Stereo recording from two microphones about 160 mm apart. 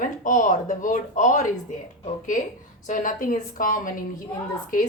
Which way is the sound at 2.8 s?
55° left (ahead or behind).